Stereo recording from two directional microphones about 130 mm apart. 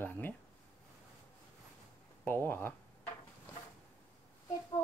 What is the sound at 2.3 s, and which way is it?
Speech, 15° left (ahead or behind).